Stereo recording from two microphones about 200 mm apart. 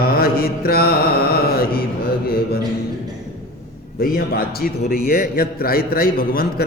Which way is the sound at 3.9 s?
50° left (ahead or behind).